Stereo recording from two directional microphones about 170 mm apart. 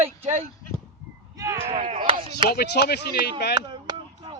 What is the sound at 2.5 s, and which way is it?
Speech, 70° left (ahead or behind).